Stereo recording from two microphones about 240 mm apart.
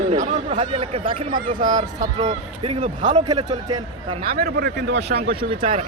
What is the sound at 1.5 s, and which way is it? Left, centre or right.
Speech, right.